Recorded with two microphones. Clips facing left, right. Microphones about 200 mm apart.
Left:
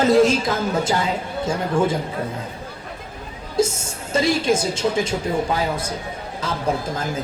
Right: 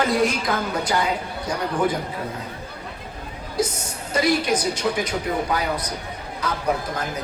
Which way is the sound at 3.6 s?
25° left (ahead or behind).